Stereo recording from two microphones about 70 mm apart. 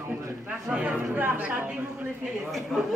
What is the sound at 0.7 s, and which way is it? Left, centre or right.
Speech, centre.